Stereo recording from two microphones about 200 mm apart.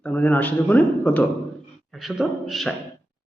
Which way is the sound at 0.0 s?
10° left (ahead or behind).